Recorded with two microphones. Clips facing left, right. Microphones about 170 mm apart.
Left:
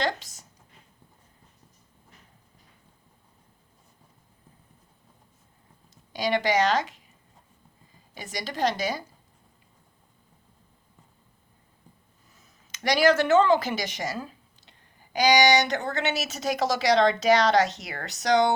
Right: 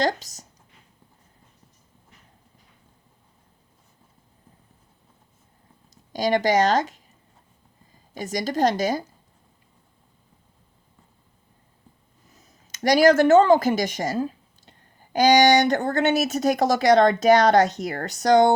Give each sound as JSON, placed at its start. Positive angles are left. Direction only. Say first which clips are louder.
{"t": 0.0, "sound": "speech", "louder": "right 5 dB", "side_deg": -40}
{"t": 5.9, "sound": "speech", "louder": "right 4 dB", "side_deg": -45}
{"t": 8.1, "sound": "a woman's voice", "louder": "right 9 dB", "side_deg": -45}
{"t": 12.4, "sound": "speech", "louder": "right 8 dB", "side_deg": -45}